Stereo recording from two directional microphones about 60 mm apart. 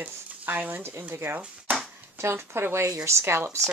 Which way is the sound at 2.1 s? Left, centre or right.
Right.